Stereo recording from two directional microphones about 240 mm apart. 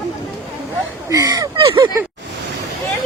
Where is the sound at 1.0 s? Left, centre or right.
Centre.